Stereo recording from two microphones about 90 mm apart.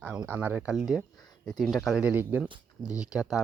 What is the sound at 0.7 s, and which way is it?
Speech, 5° right (ahead or behind).